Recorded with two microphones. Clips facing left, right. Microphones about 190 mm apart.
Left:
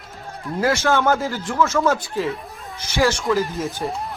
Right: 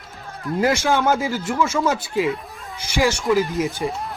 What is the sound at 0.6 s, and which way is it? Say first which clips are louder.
Speech: even; 15° right (ahead or behind).